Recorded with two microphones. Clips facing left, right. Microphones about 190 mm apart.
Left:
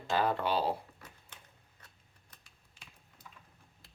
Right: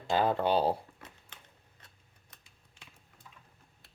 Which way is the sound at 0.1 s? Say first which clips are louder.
Right 3 dB; 25° right (ahead or behind).